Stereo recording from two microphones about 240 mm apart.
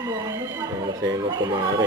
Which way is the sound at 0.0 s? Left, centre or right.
Centre.